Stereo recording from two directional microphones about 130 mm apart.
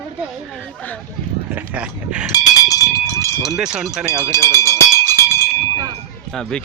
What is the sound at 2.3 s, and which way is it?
Cowbell, 30° left (ahead or behind).